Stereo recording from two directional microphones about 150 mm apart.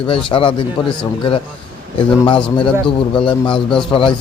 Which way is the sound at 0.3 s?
35° left (ahead or behind).